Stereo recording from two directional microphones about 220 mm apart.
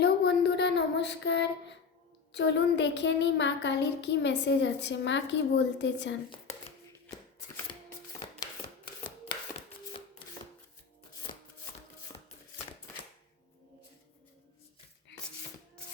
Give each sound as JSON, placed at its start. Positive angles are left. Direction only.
{"t": 0.0, "sound": "child singing", "side_deg": 50}